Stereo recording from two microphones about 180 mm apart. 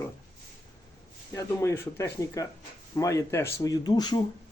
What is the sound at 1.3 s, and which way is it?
Speech, 15° left (ahead or behind).